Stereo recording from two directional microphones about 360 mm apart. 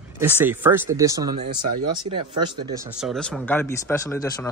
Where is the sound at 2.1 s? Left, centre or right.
Centre.